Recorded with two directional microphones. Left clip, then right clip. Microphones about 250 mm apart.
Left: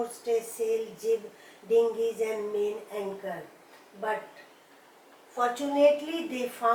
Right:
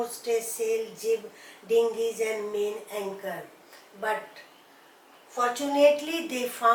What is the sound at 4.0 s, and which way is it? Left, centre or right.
Speech, centre.